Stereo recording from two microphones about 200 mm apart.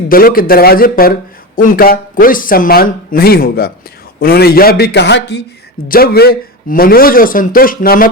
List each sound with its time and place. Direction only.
0.1 s a man's voice: 45° left (ahead or behind)